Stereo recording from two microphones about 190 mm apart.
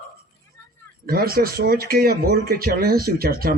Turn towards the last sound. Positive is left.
turn(degrees=-50)  # may be behind; listen again after turning